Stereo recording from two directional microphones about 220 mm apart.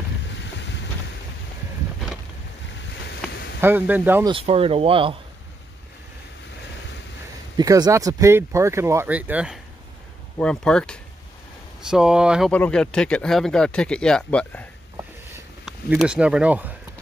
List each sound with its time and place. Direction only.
0.3 s boat: 55° left (ahead or behind)
3.2 s a sound: 5° left (ahead or behind)
3.6 s speech: 10° right (ahead or behind)
4.3 s speech: 25° right (ahead or behind)
7.5 s speech: 15° right (ahead or behind)